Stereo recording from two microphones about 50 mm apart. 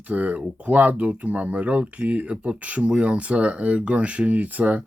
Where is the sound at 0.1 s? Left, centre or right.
Right.